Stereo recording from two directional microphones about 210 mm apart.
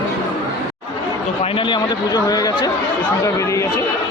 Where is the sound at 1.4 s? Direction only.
25° left (ahead or behind).